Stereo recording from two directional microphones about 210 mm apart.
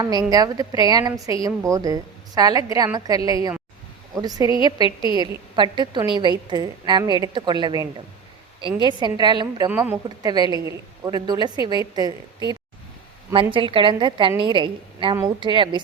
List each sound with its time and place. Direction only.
0.0 s a woman's voice: 20° right (ahead or behind)
9.6 s a woman's voice: 5° right (ahead or behind)
10.2 s a woman's voice: 20° right (ahead or behind)